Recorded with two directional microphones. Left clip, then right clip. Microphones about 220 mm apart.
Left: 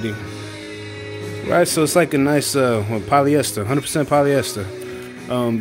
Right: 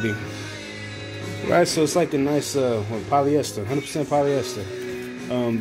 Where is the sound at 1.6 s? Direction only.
25° left (ahead or behind).